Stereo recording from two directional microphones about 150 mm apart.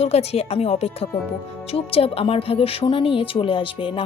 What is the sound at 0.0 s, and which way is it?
Speech, 45° left (ahead or behind).